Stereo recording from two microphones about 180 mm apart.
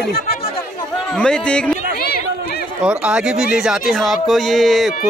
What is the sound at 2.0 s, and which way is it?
Chatter, 60° left (ahead or behind).